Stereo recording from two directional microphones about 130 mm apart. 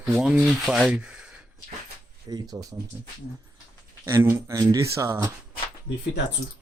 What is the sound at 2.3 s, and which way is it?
Speech, 30° right (ahead or behind).